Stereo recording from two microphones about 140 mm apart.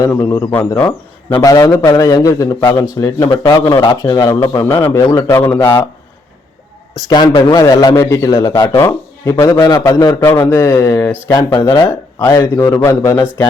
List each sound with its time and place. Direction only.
0.0 s speech: 20° left (ahead or behind)
1.4 s a man's voice: 25° left (ahead or behind)
3.2 s a man's voice: 35° left (ahead or behind)
7.1 s a man's voice: 30° left (ahead or behind)
10.2 s a man's voice: 15° left (ahead or behind)